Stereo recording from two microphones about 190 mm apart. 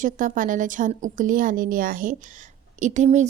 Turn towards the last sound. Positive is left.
turn(degrees=-40)  # may be behind; listen again after turning